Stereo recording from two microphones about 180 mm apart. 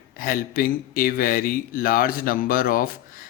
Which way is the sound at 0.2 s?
50° left (ahead or behind).